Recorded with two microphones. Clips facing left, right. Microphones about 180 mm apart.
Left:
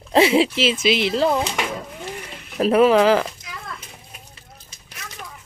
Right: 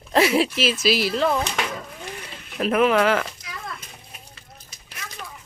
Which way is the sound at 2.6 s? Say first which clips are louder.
Left 4 dB; 35° left (ahead or behind).